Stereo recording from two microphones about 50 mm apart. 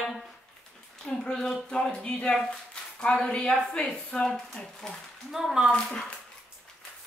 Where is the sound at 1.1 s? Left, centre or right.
Left.